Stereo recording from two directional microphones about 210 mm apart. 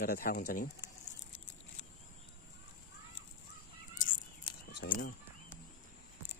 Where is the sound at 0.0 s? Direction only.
45° left (ahead or behind).